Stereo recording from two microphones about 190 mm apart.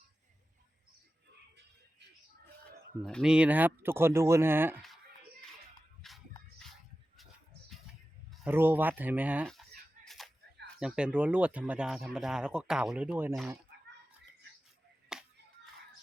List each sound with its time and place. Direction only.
3.0 s speech: centre (ahead or behind)
6.0 s music: centre (ahead or behind)
8.4 s speech: 10° right (ahead or behind)
9.5 s chicken: centre (ahead or behind)
10.8 s speech: 5° right (ahead or behind)
15.1 s a sound: 5° right (ahead or behind)